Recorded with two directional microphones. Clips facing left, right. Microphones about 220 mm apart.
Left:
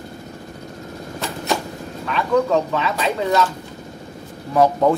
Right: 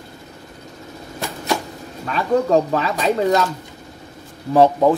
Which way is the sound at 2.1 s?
35° right (ahead or behind).